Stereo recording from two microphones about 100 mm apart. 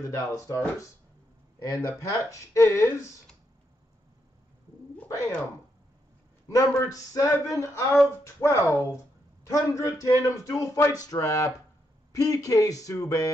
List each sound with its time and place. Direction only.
0.0 s speech: 30° left (ahead or behind)
1.6 s speech: 35° left (ahead or behind)
6.4 s speech: 35° left (ahead or behind)